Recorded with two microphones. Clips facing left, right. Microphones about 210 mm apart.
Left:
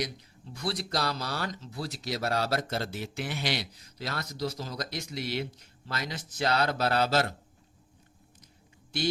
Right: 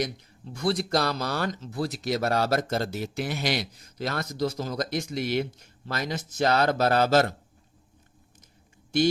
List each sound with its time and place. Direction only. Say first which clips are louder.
0.5 s speech: right 7 dB; 50° right (ahead or behind)